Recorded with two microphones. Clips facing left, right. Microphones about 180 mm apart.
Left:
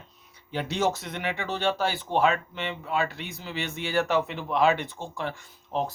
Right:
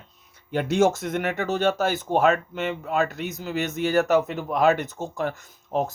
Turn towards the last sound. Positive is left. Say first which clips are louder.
# right 4 dB
turn(degrees=-45)  # may be behind; listen again after turning